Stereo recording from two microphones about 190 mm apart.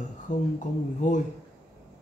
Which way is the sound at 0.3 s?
40° left (ahead or behind).